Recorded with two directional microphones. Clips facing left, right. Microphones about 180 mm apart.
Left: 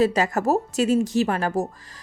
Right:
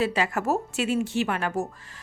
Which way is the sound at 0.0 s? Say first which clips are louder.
Left 5 dB; 40° left (ahead or behind).